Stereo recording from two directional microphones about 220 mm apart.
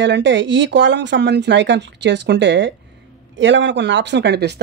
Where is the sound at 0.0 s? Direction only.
55° right (ahead or behind).